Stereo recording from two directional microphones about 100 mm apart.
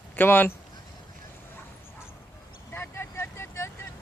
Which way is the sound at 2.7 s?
25° left (ahead or behind).